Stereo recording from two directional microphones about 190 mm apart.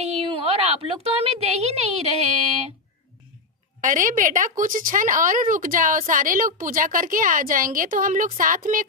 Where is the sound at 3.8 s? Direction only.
45° right (ahead or behind).